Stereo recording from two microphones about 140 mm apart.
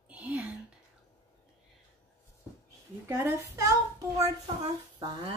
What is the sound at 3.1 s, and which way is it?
A child's voice, 20° right (ahead or behind).